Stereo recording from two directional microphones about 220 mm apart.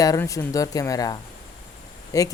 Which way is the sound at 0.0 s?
15° left (ahead or behind).